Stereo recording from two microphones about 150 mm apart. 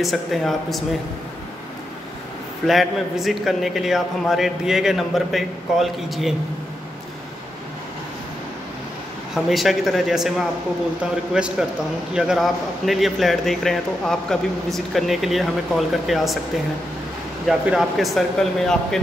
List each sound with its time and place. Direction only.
0.0 s speech: centre (ahead or behind)
2.6 s speech: centre (ahead or behind)
9.3 s speech: centre (ahead or behind)
17.5 s speech: centre (ahead or behind)